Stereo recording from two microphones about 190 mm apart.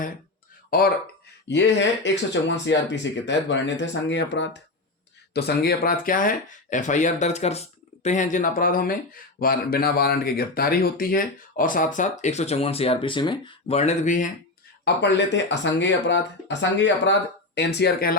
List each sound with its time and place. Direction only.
0.7 s speech: 50° left (ahead or behind)
1.5 s speech: 65° left (ahead or behind)
5.3 s speech: 60° left (ahead or behind); by 14.3 s 40° left (ahead or behind)
14.8 s speech: 65° left (ahead or behind)